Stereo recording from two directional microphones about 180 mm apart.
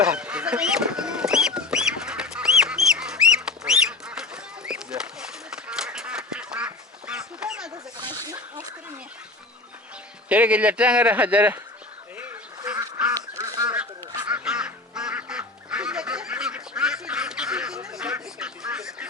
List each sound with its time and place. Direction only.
0.0 s fowl: 5° right (ahead or behind)
3.7 s bird: 5° right (ahead or behind)
5.5 s duck: 5° right (ahead or behind)
8.0 s a sound: 20° right (ahead or behind)
10.2 s speech: 10° right (ahead or behind)
12.1 s duck: 15° right (ahead or behind)
14.3 s duck: 5° right (ahead or behind)